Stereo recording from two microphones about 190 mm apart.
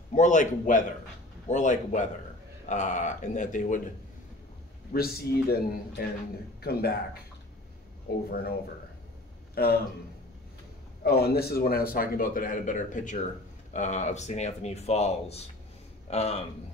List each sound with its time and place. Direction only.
0.1 s speech: 40° left (ahead or behind)
4.9 s speech: 55° left (ahead or behind)
8.1 s speech: 55° left (ahead or behind)
11.1 s speech: 55° left (ahead or behind); by 16.4 s 35° left (ahead or behind)